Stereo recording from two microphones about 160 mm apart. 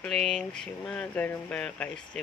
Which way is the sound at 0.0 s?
5° left (ahead or behind).